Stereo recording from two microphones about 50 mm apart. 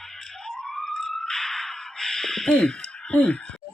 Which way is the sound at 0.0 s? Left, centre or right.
Centre.